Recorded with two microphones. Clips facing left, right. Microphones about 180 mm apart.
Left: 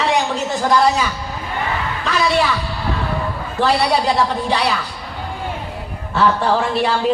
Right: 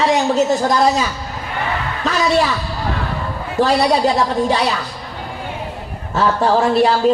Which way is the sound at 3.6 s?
40° right (ahead or behind).